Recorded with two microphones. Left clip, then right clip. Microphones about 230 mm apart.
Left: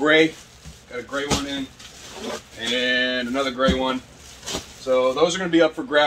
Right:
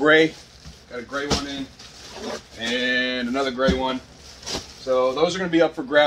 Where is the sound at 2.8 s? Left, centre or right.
Centre.